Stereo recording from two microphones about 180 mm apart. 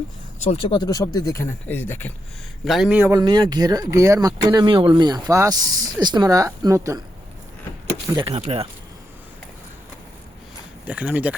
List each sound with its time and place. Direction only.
0.3 s speech: 35° left (ahead or behind); by 2.1 s 10° left (ahead or behind)
2.6 s a man's voice: centre (ahead or behind)
3.1 s speech: 25° right (ahead or behind)
8.0 s speech: 20° right (ahead or behind)
8.3 s speech: 35° right (ahead or behind)
10.8 s speech: 10° right (ahead or behind)